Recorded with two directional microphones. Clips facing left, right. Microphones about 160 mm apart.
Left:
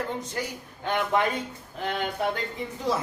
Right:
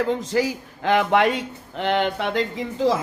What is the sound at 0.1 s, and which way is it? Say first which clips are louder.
Speech: right 10 dB; 90° right.